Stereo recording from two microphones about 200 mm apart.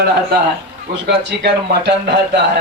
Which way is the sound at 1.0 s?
60° right (ahead or behind).